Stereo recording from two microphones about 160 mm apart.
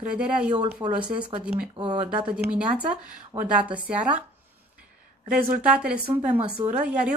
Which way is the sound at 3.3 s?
20° right (ahead or behind).